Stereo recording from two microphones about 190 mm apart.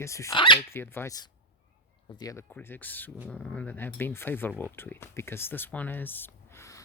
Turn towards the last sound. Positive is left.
turn(degrees=15)  # may be behind; listen again after turning